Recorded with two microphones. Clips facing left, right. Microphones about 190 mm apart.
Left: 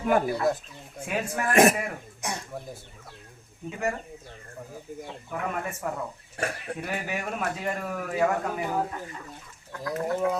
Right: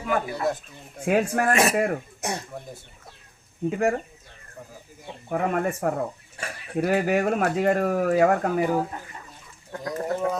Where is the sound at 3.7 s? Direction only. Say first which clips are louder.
Right 7 dB; 55° right (ahead or behind).